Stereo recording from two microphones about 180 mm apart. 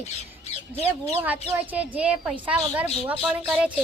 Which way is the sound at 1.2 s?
10° right (ahead or behind).